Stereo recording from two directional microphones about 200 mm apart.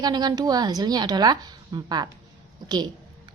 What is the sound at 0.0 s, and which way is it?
A woman's voice, 20° right (ahead or behind).